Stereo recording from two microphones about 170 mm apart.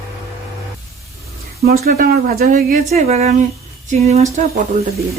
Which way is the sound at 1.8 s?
60° right (ahead or behind).